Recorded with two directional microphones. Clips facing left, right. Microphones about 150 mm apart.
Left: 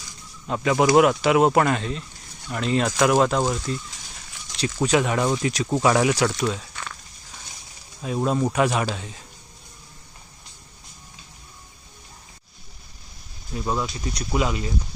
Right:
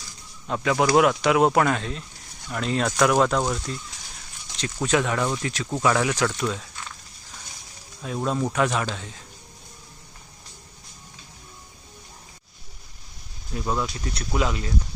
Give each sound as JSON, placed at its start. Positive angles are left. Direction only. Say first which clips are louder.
{"t": 0.4, "sound": "speech", "louder": "left 2 dB", "side_deg": 0}
{"t": 8.0, "sound": "speech", "louder": "left 3 dB", "side_deg": 10}
{"t": 13.5, "sound": "speech", "louder": "left 1 dB", "side_deg": 5}